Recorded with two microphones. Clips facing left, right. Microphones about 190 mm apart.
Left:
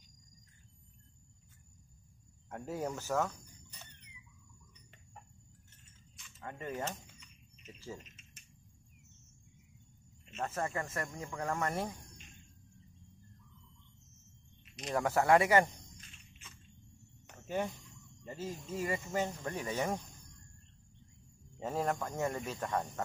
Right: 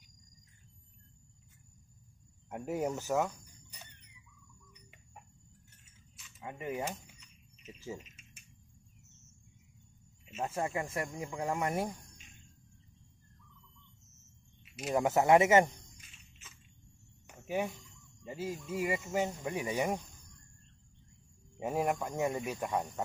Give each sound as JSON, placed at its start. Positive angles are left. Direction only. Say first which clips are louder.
{"t": 2.5, "sound": "a sound", "louder": "right 4 dB", "side_deg": -15}
{"t": 6.1, "sound": "keys jangling", "louder": "right 1 dB", "side_deg": -10}
{"t": 7.2, "sound": "fire alarm", "louder": "left 2 dB", "side_deg": 0}
{"t": 8.0, "sound": "keys jangling", "louder": "right 1 dB", "side_deg": -10}
{"t": 10.2, "sound": "speech", "louder": "right 2 dB", "side_deg": -10}
{"t": 14.6, "sound": "cricket", "louder": "right 4 dB", "side_deg": -5}
{"t": 15.0, "sound": "speech", "louder": "right 2 dB", "side_deg": -20}
{"t": 16.0, "sound": "a sound", "louder": "left 2 dB", "side_deg": -5}
{"t": 18.2, "sound": "speech", "louder": "right 3 dB", "side_deg": -10}
{"t": 21.5, "sound": "speech", "louder": "right 2 dB", "side_deg": -15}